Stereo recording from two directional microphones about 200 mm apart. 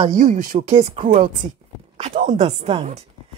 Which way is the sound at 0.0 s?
40° right (ahead or behind).